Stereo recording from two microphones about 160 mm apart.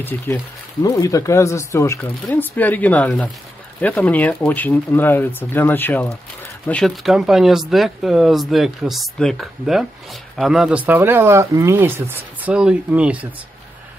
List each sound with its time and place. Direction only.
0.8 s speech: 20° left (ahead or behind); by 13.3 s 10° right (ahead or behind)